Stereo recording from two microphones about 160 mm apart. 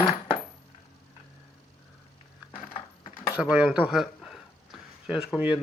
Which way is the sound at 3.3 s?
10° right (ahead or behind).